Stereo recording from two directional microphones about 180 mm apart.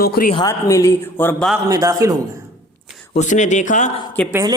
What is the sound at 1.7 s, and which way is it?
Speech, 20° right (ahead or behind).